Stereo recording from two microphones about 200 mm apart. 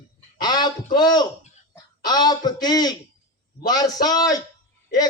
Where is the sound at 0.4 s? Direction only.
20° left (ahead or behind).